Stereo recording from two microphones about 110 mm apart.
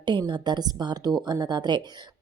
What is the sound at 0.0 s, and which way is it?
A woman's voice, 45° right (ahead or behind).